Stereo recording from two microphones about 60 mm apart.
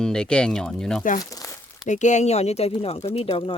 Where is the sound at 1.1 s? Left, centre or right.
Left.